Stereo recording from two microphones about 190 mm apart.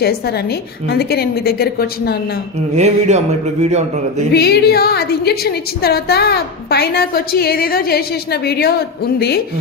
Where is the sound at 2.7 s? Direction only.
35° right (ahead or behind).